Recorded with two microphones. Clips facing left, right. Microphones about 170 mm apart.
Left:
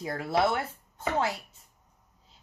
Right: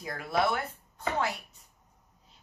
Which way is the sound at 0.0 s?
30° left (ahead or behind).